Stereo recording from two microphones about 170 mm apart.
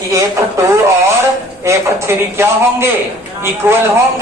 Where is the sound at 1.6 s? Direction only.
15° right (ahead or behind).